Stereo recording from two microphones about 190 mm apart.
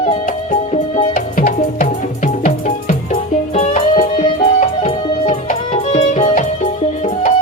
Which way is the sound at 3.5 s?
35° left (ahead or behind).